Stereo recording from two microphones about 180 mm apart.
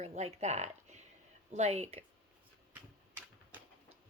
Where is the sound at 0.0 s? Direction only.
35° right (ahead or behind).